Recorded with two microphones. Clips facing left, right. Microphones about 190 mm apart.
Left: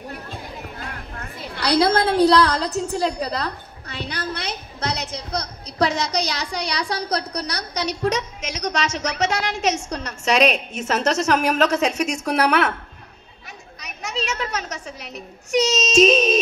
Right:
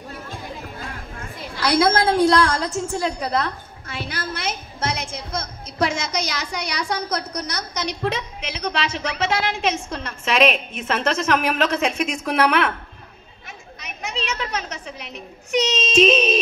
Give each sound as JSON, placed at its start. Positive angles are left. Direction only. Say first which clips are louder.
{"t": 1.5, "sound": "a woman's voice", "louder": "even", "side_deg": 65}
{"t": 2.8, "sound": "a woman's voice", "louder": "left 2 dB", "side_deg": 40}
{"t": 3.2, "sound": "a sound", "louder": "right 2 dB", "side_deg": 35}
{"t": 5.0, "sound": "a woman's voice", "louder": "left 1 dB", "side_deg": 35}
{"t": 13.7, "sound": "a child's voice", "louder": "left 1 dB", "side_deg": 40}